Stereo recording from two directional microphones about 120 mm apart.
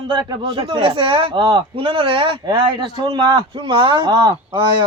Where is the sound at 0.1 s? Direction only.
45° right (ahead or behind).